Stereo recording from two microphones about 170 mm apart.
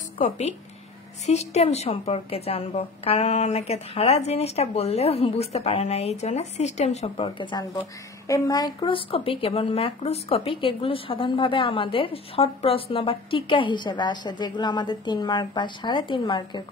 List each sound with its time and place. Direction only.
1.2 s a woman's voice: 40° left (ahead or behind); by 16.6 s 25° left (ahead or behind)